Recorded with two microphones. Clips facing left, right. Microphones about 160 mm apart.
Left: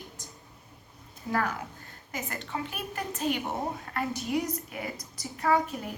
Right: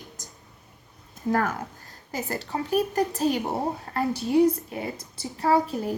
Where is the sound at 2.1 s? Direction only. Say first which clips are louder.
Right 6 dB; 35° right (ahead or behind).